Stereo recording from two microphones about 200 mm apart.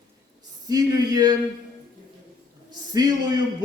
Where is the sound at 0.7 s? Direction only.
20° right (ahead or behind).